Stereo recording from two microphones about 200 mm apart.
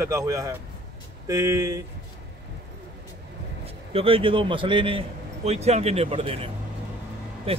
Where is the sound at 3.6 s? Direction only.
30° right (ahead or behind).